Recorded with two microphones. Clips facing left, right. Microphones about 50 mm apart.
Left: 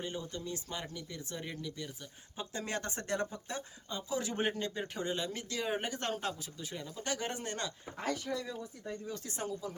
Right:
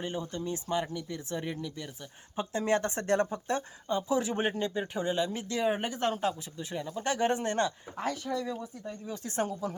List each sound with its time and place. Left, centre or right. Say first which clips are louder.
0.0 s speech: right 5 dB; right
3.8 s speech: right 8 dB; right
5.6 s speech: right 7 dB; centre
6.6 s speech: right 7 dB; right
9.2 s speech: right 12 dB; right